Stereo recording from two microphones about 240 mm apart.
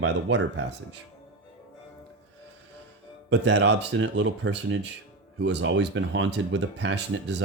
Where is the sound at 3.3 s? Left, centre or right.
Right.